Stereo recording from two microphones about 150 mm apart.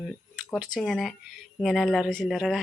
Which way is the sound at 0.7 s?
Centre (ahead or behind).